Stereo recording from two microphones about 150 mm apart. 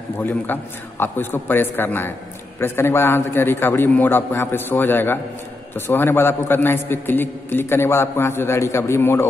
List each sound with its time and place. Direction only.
0.2 s a man's voice: 15° left (ahead or behind)